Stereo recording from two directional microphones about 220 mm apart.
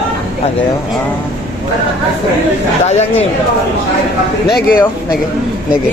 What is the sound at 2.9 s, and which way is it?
Speech, 30° left (ahead or behind).